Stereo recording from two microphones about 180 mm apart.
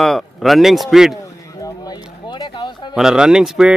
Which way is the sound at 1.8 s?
25° left (ahead or behind).